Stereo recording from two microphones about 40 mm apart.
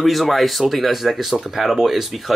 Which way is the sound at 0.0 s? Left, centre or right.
Centre.